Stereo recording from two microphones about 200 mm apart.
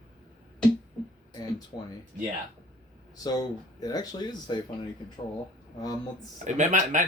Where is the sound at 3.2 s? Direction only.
20° left (ahead or behind).